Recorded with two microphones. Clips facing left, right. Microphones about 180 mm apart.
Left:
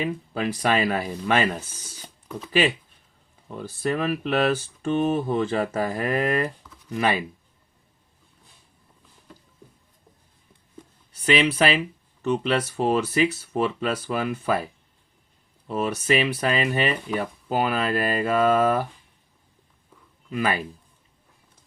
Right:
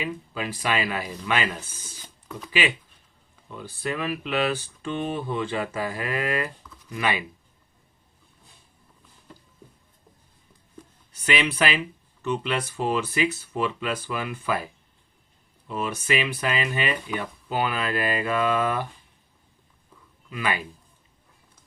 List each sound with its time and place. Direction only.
0.0 s speech: 40° left (ahead or behind)
3.5 s speech: 40° left (ahead or behind)
11.3 s speech: 35° left (ahead or behind)
20.3 s speech: 35° left (ahead or behind)